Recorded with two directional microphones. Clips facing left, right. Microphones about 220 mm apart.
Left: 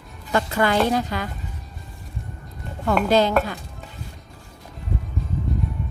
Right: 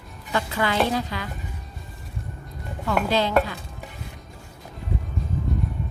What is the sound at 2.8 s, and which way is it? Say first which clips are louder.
Speech: left 4 dB; 45° left (ahead or behind).